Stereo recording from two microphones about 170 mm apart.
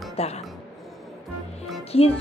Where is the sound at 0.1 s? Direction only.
35° left (ahead or behind).